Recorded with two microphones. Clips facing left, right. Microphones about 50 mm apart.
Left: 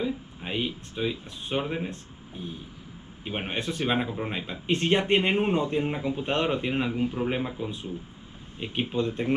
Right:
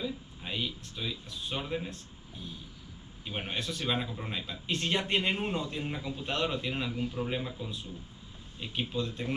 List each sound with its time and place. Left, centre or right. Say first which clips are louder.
0.0 s speech: left 6 dB; left